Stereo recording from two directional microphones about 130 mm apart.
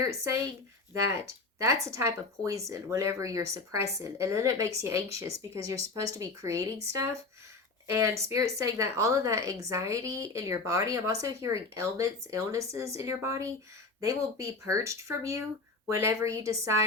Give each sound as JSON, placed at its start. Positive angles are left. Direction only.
{"t": 0.0, "sound": "a woman's voice", "side_deg": -25}
{"t": 8.3, "sound": "a woman's voice", "side_deg": -25}